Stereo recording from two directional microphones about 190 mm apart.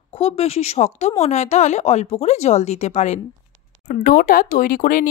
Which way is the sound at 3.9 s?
50° left (ahead or behind).